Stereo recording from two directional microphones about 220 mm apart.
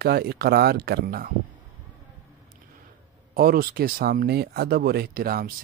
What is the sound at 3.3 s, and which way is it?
Speech, 45° right (ahead or behind).